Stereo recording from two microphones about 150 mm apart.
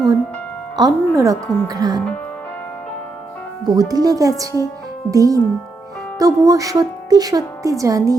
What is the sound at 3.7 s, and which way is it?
A woman's voice, 25° right (ahead or behind).